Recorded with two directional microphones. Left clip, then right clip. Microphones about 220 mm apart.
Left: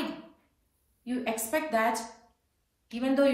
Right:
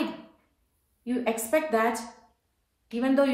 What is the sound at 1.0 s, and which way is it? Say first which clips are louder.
A woman's voice: right 4 dB; 20° right (ahead or behind).